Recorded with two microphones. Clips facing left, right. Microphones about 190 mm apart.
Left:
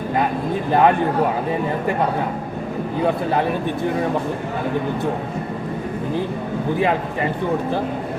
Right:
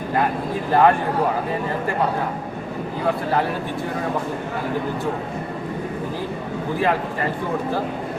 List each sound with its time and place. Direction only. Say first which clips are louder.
0.7 s a man's voice: even; 20° left (ahead or behind)
6.7 s a man's voice: even; 20° left (ahead or behind)